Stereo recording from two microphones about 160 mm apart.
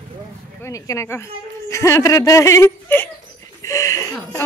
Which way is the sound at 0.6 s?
20° left (ahead or behind).